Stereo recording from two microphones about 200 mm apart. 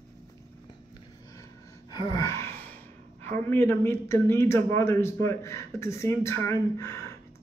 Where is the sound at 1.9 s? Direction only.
20° left (ahead or behind).